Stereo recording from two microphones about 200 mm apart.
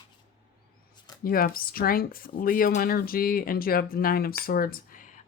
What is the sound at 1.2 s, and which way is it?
Speech, 45° left (ahead or behind).